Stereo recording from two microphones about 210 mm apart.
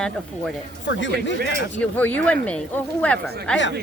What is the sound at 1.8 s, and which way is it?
Speech, 10° left (ahead or behind).